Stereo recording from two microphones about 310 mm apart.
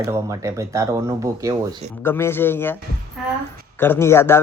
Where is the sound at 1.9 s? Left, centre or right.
Centre.